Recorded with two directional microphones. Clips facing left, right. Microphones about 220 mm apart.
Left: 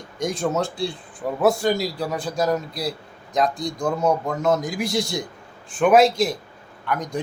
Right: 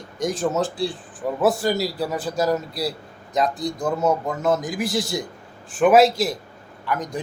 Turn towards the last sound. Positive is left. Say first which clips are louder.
# even
turn(degrees=0)  # may be behind; listen again after turning